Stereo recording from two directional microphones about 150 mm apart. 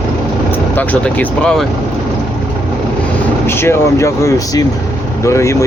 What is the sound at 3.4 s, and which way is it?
Speech, 15° left (ahead or behind).